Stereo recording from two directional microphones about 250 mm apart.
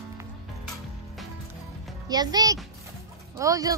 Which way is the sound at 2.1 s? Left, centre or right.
Centre.